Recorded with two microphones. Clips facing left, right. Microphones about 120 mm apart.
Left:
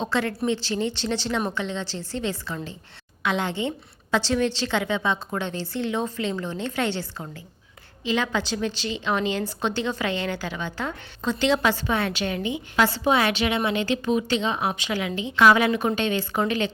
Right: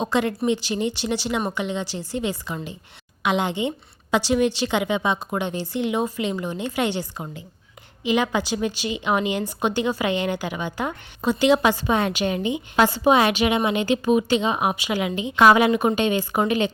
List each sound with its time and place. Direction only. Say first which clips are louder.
0.0 s a woman's voice: right 3 dB; 15° right (ahead or behind)